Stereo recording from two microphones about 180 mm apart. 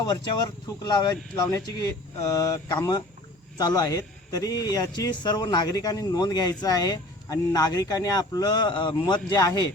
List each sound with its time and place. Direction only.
0.0 s a man's voice: 25° left (ahead or behind)